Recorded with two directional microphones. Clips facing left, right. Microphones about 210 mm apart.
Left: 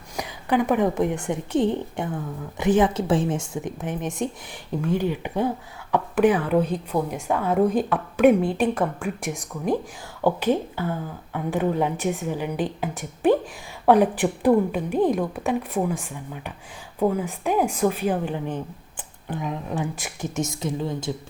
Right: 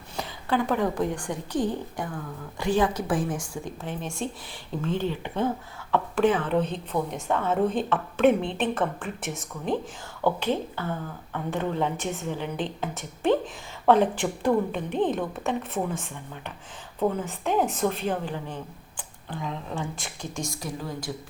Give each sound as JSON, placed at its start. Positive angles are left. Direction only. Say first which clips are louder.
{"t": 0.2, "sound": "a woman's voice", "louder": "left 4 dB", "side_deg": 15}